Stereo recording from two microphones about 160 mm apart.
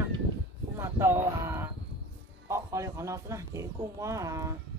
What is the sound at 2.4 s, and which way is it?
Speech, 20° right (ahead or behind).